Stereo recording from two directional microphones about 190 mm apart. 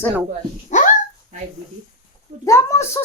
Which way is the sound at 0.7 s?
40° left (ahead or behind).